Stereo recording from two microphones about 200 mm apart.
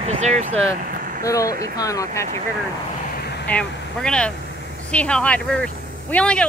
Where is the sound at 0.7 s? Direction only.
45° right (ahead or behind).